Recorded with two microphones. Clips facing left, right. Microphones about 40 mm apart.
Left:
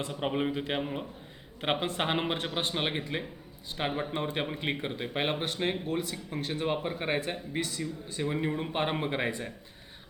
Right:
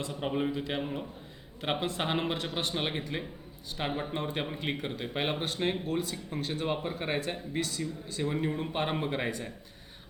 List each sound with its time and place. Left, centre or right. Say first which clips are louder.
0.1 s a man's voice: even; left
2.7 s a man's voice: left 1 dB; left